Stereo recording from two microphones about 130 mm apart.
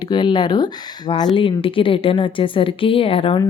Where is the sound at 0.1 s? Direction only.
35° left (ahead or behind).